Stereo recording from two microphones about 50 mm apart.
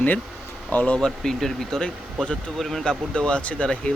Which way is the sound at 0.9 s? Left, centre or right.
Centre.